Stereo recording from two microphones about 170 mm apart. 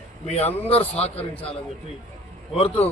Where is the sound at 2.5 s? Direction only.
35° left (ahead or behind).